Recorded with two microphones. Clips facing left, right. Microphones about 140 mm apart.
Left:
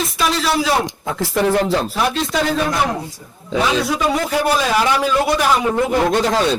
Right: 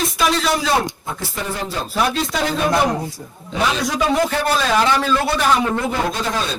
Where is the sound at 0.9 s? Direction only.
90° left.